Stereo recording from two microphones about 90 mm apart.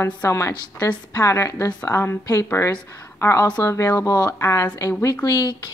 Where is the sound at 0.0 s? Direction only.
30° left (ahead or behind).